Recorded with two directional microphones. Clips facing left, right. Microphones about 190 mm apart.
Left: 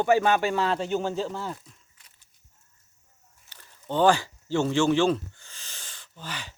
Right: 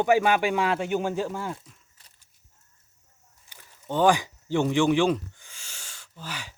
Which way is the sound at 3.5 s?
10° right (ahead or behind).